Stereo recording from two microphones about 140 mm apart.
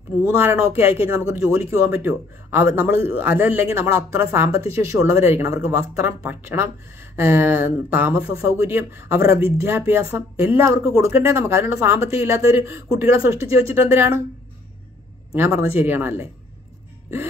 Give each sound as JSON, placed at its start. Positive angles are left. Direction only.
{"t": 0.2, "sound": "speech", "side_deg": -15}
{"t": 15.3, "sound": "speech", "side_deg": -15}